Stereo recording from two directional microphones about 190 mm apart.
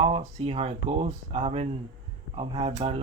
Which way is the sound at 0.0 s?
35° right (ahead or behind).